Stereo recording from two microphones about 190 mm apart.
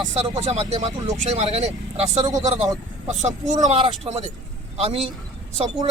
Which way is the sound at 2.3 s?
20° right (ahead or behind).